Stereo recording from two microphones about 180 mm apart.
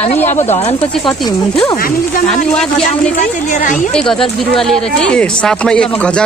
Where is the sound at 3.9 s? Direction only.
5° left (ahead or behind).